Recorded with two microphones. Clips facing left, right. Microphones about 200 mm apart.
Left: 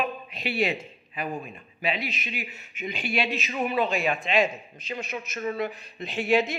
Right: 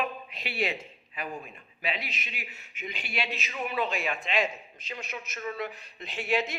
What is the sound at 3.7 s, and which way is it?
Speech, 30° left (ahead or behind).